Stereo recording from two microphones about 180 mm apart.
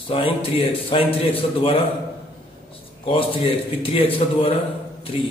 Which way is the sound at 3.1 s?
30° left (ahead or behind).